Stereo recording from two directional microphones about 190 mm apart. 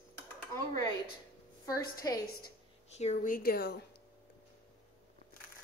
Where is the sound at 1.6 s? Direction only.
20° left (ahead or behind).